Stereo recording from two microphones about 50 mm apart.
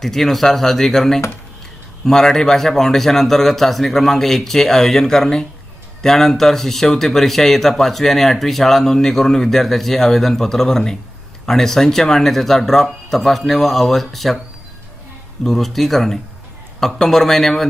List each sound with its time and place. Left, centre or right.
0.0 s speech: centre
15.4 s speech: centre